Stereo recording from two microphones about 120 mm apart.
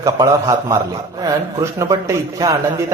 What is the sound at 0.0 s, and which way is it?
A man's voice, 30° right (ahead or behind).